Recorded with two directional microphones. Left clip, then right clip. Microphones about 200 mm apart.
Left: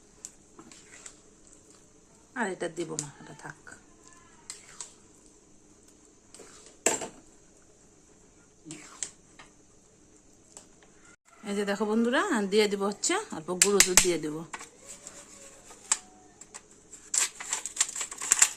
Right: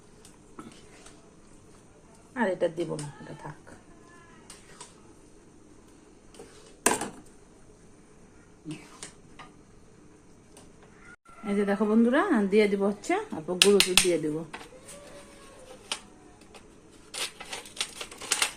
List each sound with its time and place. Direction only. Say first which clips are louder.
2.3 s speech: right 5 dB; 20° left (ahead or behind)
11.4 s a woman's voice: right 3 dB; 10° left (ahead or behind)
13.7 s speech: right 1 dB; 20° left (ahead or behind)
14.3 s a woman's voice: right 4 dB; 10° left (ahead or behind)
17.1 s a sound: left 4 dB; 15° left (ahead or behind)